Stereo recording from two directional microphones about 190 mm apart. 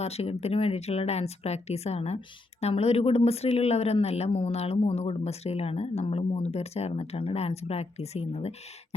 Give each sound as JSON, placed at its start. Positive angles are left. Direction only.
{"t": 0.0, "sound": "speech", "side_deg": 35}